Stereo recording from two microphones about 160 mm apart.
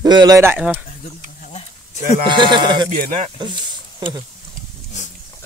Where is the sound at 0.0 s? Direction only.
25° right (ahead or behind).